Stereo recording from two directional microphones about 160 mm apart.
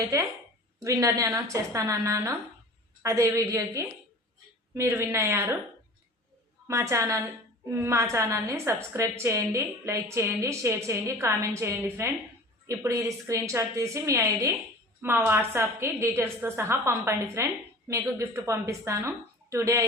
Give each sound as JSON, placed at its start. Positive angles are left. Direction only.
{"t": 0.8, "sound": "a woman's voice", "side_deg": -20}
{"t": 6.7, "sound": "a woman's voice", "side_deg": -20}